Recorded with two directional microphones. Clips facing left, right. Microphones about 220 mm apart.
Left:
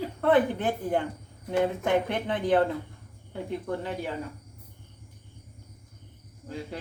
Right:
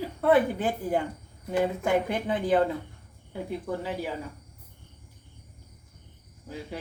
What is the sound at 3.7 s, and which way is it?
Speech, 5° right (ahead or behind).